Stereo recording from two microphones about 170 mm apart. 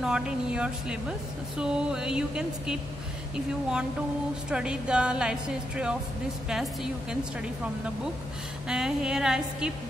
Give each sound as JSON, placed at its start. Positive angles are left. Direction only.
{"t": 0.0, "sound": "a woman's voice", "side_deg": -5}
{"t": 4.5, "sound": "a woman's voice", "side_deg": -5}
{"t": 8.6, "sound": "a woman's voice", "side_deg": -5}